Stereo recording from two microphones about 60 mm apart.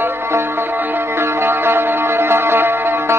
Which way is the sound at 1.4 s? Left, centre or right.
Right.